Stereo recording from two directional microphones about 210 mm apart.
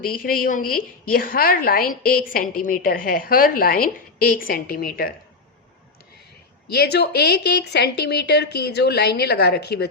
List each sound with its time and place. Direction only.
0.0 s a woman's voice: 45° left (ahead or behind)
6.7 s a woman's voice: 50° left (ahead or behind)